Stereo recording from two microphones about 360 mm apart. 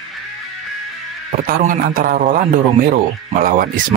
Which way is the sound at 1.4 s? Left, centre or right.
Right.